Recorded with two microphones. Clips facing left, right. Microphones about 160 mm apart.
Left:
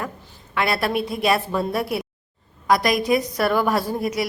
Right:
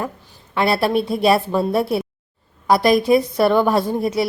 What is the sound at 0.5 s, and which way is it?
A woman's voice, 30° right (ahead or behind).